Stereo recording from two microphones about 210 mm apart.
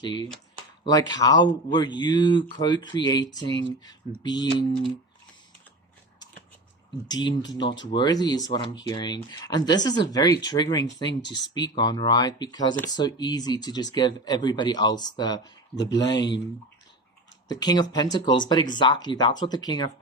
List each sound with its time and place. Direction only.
0.0 s speech: 20° left (ahead or behind)
7.1 s speech: 20° left (ahead or behind)
11.2 s speech: 55° left (ahead or behind)
11.8 s speech: 20° left (ahead or behind)
17.5 s speech: 20° left (ahead or behind)